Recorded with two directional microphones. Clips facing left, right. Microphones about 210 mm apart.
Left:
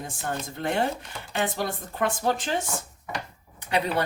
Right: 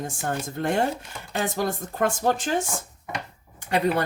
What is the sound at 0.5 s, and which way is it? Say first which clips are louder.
Speech: right 2 dB; 45° right (ahead or behind).